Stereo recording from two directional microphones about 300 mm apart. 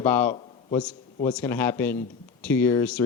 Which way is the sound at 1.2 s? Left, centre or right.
Centre.